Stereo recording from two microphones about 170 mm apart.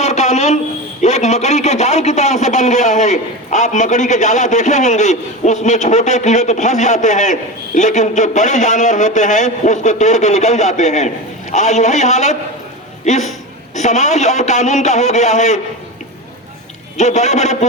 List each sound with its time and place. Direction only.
0.0 s a sound: 40° left (ahead or behind)
1.0 s a man's voice: 45° left (ahead or behind)
13.7 s a man's voice: 45° left (ahead or behind)
17.0 s a man's voice: 45° left (ahead or behind)